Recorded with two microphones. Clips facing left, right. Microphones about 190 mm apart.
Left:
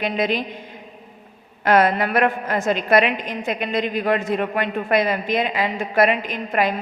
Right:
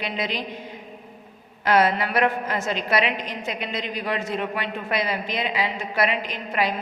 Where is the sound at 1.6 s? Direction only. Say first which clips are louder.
Left 3 dB; 55° left (ahead or behind).